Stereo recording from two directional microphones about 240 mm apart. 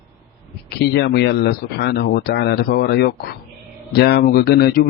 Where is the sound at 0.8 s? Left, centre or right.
Left.